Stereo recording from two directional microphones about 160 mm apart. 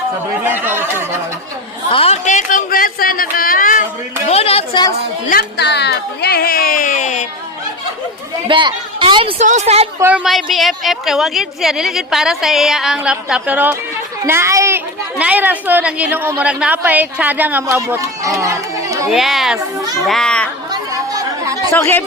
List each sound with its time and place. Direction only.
0.5 s a woman's voice: 10° right (ahead or behind)
1.9 s speech: 35° left (ahead or behind)
2.2 s a sound: 55° left (ahead or behind)
4.3 s a woman's voice: 40° left (ahead or behind)
5.3 s speech: 80° left; by 7.3 s 55° left (ahead or behind)
8.4 s a woman's voice: 30° right (ahead or behind)
9.4 s a woman's voice: 45° right (ahead or behind)
10.2 s a woman's voice: centre (ahead or behind); by 19.0 s 20° right (ahead or behind)
19.0 s a woman's voice: centre (ahead or behind)
19.5 s a child's voice: 20° right (ahead or behind)
20.1 s a woman's voice: 5° left (ahead or behind)
21.1 s chatter: 20° right (ahead or behind)
21.8 s speech: 15° left (ahead or behind)